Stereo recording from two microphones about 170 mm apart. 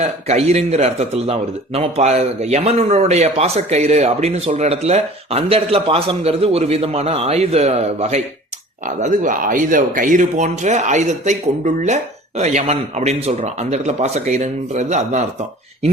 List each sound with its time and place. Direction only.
0.0 s speech: 40° right (ahead or behind)
9.0 s a man's voice: 50° right (ahead or behind)